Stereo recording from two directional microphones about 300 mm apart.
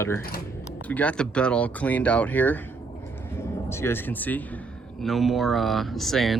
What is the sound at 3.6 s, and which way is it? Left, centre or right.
Speech, centre.